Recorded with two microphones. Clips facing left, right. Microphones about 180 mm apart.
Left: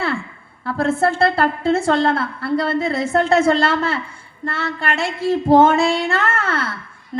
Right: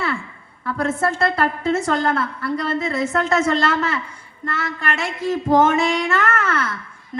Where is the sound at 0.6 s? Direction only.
30° left (ahead or behind).